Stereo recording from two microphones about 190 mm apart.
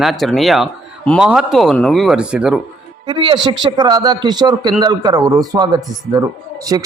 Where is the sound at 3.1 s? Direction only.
25° right (ahead or behind).